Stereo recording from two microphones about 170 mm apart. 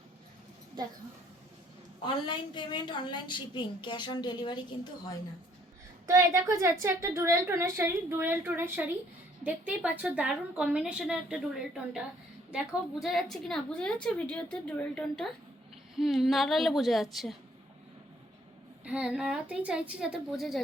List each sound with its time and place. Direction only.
2.2 s a woman's voice: 25° left (ahead or behind)
6.1 s a woman's voice: 20° right (ahead or behind)
12.5 s a woman's voice: centre (ahead or behind)
18.9 s a woman's voice: 5° right (ahead or behind)